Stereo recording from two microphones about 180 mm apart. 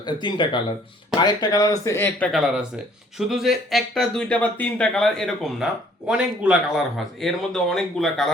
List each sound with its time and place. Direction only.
0.0 s speech: 25° left (ahead or behind); by 8.3 s centre (ahead or behind)